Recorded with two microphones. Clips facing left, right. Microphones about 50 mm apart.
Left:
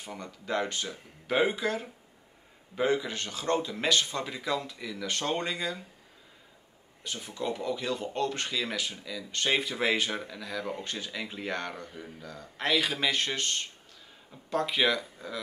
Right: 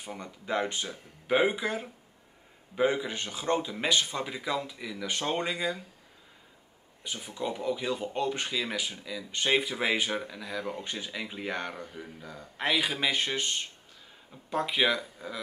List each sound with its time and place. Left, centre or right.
0.0 s speech: centre
7.0 s speech: centre